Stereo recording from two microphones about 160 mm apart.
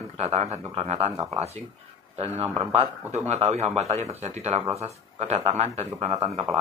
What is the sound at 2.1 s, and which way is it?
Speech, 40° right (ahead or behind).